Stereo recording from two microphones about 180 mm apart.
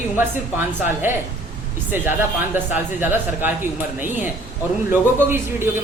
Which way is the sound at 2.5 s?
10° right (ahead or behind).